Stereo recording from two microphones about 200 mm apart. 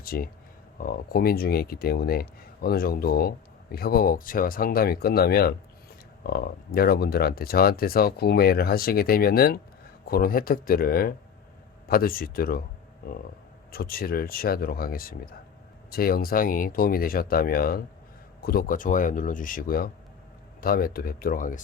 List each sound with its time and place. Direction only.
0.0 s speech: 50° left (ahead or behind)